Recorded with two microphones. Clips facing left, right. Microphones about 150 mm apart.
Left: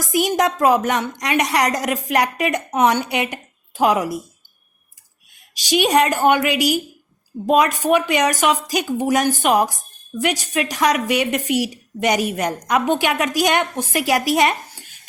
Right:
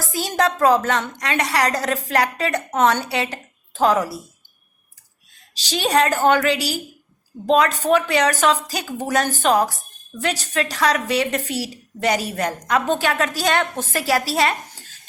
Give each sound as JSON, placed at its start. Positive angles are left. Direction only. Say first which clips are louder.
{"t": 0.0, "sound": "a woman's voice", "louder": "left 3 dB", "side_deg": 15}
{"t": 5.3, "sound": "a woman's voice", "louder": "left 7 dB", "side_deg": 15}